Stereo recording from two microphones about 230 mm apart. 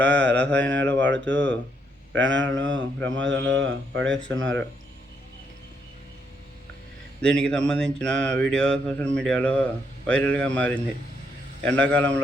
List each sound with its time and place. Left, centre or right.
0.0 s mantra: centre
0.6 s a man's voice: right
7.2 s speech: centre